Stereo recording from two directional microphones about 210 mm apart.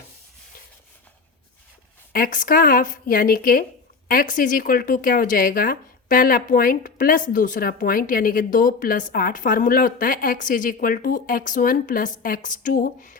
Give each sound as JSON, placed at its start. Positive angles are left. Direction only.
{"t": 2.1, "sound": "speech", "side_deg": 40}